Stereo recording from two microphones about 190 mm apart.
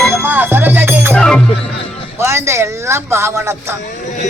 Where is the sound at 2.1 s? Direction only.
15° right (ahead or behind).